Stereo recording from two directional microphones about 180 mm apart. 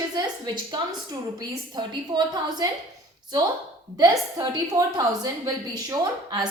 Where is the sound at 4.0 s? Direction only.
20° right (ahead or behind).